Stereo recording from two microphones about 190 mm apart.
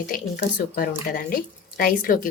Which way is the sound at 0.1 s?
45° left (ahead or behind).